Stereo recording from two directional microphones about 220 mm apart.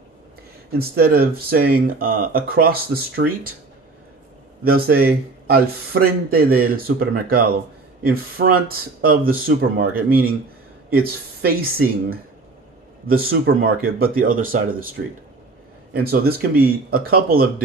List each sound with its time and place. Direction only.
0.7 s speech: 45° right (ahead or behind)
4.6 s speech: 45° right (ahead or behind)
10.9 s speech: 45° right (ahead or behind)